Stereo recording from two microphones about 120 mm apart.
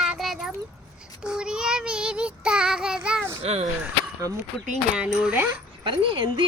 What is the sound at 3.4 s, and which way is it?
Speech, 60° right (ahead or behind).